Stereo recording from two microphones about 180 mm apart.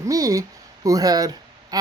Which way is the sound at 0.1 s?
20° right (ahead or behind).